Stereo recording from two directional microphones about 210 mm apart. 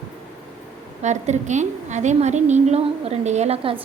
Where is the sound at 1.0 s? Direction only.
35° right (ahead or behind).